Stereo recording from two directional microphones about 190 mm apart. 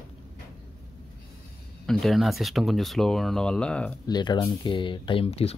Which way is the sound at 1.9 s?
Centre (ahead or behind).